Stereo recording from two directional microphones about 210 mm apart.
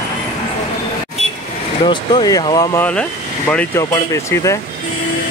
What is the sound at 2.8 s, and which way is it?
Speech, 5° left (ahead or behind).